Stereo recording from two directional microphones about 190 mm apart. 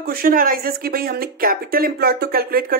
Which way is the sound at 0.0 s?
50° right (ahead or behind).